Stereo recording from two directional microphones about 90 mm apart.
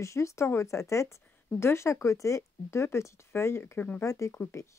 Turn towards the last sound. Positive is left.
turn(degrees=30)  # may be behind; listen again after turning